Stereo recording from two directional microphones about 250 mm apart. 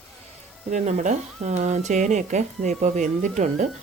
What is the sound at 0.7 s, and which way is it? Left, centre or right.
Speech, right.